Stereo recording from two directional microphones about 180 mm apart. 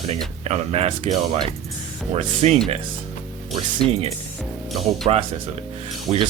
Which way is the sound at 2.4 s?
35° right (ahead or behind).